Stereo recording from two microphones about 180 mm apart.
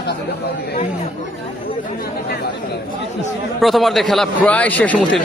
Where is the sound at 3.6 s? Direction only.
Centre (ahead or behind).